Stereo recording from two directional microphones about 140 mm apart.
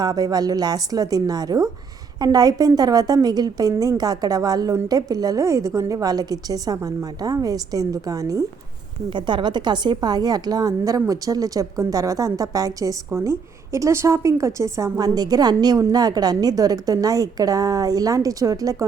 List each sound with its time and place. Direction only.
0.0 s a woman's voice: 25° right (ahead or behind)